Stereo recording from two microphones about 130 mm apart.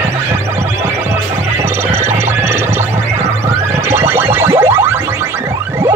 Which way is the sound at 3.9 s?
20° right (ahead or behind).